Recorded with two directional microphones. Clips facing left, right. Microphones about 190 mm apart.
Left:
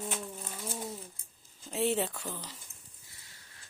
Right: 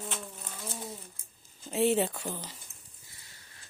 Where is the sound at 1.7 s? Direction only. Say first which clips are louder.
Right 4 dB; 5° right (ahead or behind).